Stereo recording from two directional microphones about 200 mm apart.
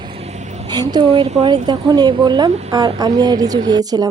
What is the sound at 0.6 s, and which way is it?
Speech, 20° right (ahead or behind).